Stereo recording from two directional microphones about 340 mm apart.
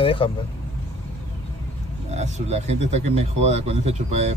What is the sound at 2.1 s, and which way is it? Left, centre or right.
Speech, centre.